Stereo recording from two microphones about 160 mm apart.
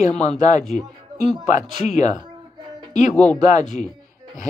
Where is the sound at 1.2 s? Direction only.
50° left (ahead or behind).